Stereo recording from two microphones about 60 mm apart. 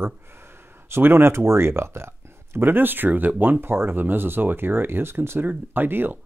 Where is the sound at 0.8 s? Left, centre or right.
Right.